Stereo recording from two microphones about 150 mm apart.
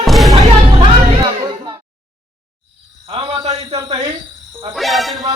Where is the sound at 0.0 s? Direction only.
Centre (ahead or behind).